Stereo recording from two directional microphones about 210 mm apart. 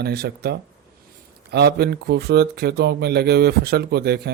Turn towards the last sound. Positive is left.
turn(degrees=-50)  # may be behind; listen again after turning